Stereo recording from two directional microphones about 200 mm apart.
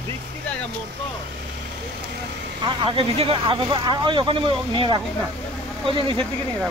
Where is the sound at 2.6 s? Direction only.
25° right (ahead or behind).